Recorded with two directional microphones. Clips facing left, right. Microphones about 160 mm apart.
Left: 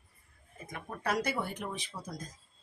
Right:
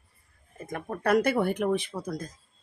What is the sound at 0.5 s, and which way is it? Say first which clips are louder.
Speech: right 8 dB; 50° right (ahead or behind).